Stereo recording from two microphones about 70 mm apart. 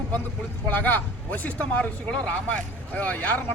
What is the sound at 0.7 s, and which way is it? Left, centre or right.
Speech, left.